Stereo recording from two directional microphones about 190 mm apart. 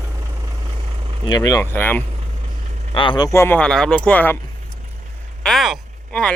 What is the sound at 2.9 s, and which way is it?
Speech, 25° left (ahead or behind).